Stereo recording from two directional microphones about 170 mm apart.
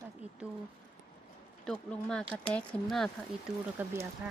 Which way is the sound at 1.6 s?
5° left (ahead or behind).